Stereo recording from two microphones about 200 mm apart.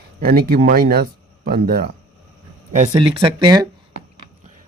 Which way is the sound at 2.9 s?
25° right (ahead or behind).